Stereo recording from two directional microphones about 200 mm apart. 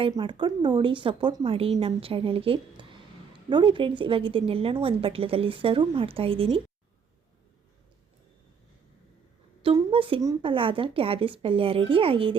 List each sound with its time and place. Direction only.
0.0 s a woman's voice: 25° right (ahead or behind)
9.6 s a woman's voice: 25° right (ahead or behind)